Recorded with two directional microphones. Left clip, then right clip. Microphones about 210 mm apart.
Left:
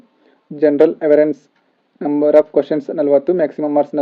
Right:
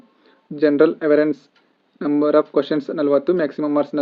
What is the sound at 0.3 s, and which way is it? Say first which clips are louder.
Speech: left 3 dB; 5° left (ahead or behind).